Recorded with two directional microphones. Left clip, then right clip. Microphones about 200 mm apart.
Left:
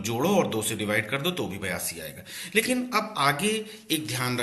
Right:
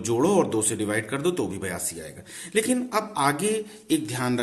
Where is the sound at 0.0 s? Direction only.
45° right (ahead or behind).